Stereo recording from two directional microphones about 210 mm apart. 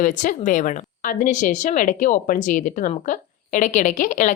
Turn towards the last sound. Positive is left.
turn(degrees=35)  # may be behind; listen again after turning